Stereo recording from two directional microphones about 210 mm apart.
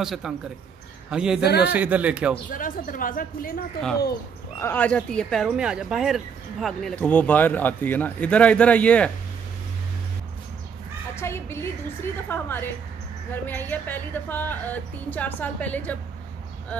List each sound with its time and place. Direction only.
0.0 s a man's voice: centre (ahead or behind)
1.4 s speech: 50° left (ahead or behind)
1.7 s speech: 5° right (ahead or behind)
2.5 s speech: 40° left (ahead or behind)
4.6 s speech: 10° left (ahead or behind)
11.1 s speech: 10° left (ahead or behind)